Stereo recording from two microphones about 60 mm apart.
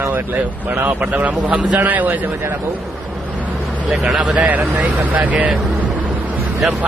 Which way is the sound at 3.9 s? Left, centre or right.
Centre.